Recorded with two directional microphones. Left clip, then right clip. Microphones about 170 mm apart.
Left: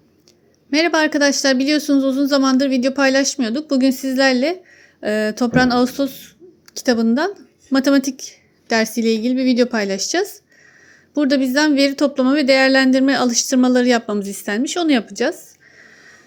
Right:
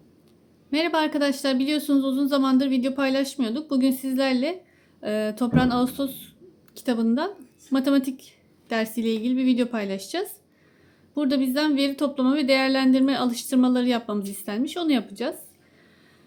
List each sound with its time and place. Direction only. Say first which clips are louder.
0.7 s speech: left 7 dB; 25° left (ahead or behind)